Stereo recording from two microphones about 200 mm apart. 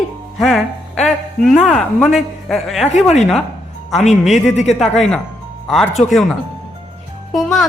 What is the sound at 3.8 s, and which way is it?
Speech, centre (ahead or behind).